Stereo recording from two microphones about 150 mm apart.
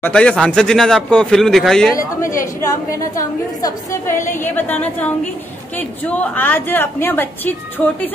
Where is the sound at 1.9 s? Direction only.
20° left (ahead or behind).